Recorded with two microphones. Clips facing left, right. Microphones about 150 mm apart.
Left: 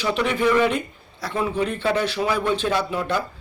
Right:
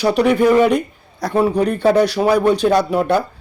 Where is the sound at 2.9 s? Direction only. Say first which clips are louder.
Right 8 dB; 55° right (ahead or behind).